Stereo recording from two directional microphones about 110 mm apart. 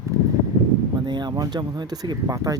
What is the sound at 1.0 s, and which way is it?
Speech, 40° right (ahead or behind).